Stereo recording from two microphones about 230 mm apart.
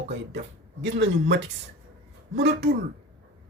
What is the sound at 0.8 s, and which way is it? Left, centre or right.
A man's voice, right.